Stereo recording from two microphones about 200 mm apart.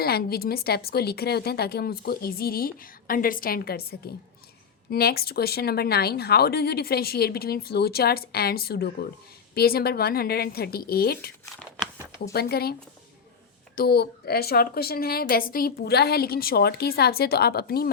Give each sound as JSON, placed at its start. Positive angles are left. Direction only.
{"t": 0.0, "sound": "speech", "side_deg": 50}
{"t": 12.3, "sound": "speech", "side_deg": 50}
{"t": 13.7, "sound": "speech", "side_deg": 50}